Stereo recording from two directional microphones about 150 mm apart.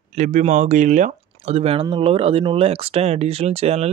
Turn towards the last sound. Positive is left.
turn(degrees=-45)  # may be behind; listen again after turning